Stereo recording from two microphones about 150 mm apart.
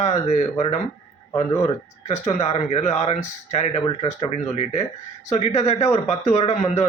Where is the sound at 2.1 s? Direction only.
45° left (ahead or behind).